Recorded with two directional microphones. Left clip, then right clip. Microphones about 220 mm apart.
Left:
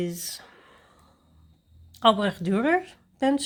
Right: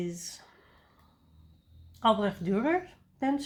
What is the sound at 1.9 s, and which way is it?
Speech, 45° left (ahead or behind).